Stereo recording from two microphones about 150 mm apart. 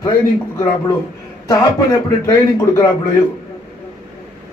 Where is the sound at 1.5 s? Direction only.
25° left (ahead or behind).